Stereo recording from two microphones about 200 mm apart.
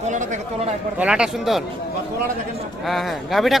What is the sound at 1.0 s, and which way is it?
Speech, 5° right (ahead or behind).